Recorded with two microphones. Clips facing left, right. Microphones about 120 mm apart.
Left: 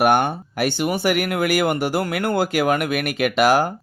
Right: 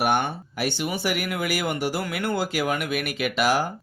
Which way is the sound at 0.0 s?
55° left (ahead or behind).